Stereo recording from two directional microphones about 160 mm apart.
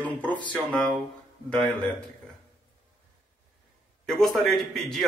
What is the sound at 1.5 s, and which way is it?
Speech, 5° left (ahead or behind).